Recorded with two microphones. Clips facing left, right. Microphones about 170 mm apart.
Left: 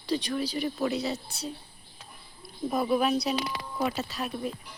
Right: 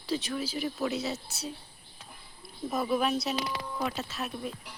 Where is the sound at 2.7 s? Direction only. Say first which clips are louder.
Left 3 dB; centre (ahead or behind).